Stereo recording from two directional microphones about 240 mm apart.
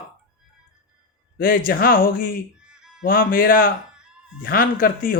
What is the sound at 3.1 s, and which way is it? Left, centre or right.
Speech, left.